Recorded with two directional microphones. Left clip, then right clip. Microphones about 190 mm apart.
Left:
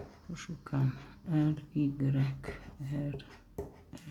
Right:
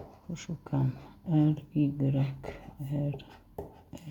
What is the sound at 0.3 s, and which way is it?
Speech, 15° right (ahead or behind).